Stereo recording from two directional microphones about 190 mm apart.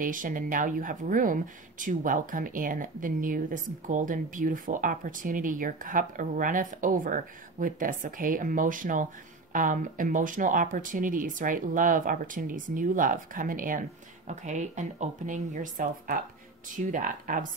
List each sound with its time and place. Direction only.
0.0 s speech: 45° right (ahead or behind)